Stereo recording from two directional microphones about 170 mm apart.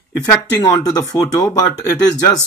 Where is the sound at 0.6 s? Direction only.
20° left (ahead or behind).